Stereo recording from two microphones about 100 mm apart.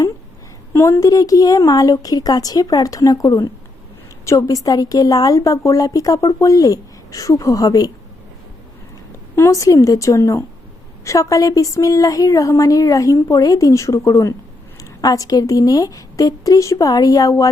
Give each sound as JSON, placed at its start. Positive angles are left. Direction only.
{"t": 0.7, "sound": "a woman's voice", "side_deg": 30}
{"t": 9.3, "sound": "a woman's voice", "side_deg": 30}